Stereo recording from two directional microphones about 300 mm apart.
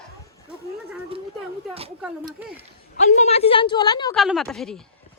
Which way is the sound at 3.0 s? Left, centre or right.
Left.